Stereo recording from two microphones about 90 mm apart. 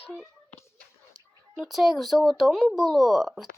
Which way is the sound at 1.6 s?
5° right (ahead or behind).